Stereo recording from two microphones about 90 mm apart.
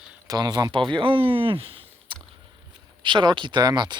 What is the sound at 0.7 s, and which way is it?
Speech, 70° right (ahead or behind).